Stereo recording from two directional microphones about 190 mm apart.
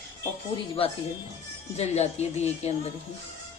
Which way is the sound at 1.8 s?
35° left (ahead or behind).